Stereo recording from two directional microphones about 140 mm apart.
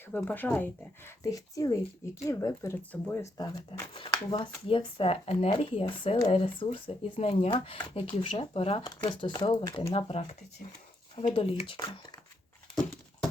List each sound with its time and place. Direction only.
0.3 s speech: 10° left (ahead or behind)
3.3 s speech: 30° left (ahead or behind)
9.9 s speech: 45° left (ahead or behind)